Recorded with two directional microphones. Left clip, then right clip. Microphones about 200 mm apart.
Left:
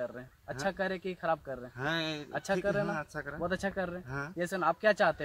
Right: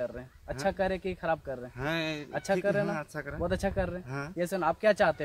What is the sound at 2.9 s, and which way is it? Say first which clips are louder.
Speech: right 1 dB; centre (ahead or behind).